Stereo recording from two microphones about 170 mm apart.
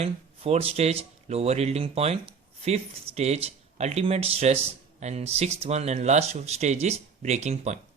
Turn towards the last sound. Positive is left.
turn(degrees=-40)  # may be behind; listen again after turning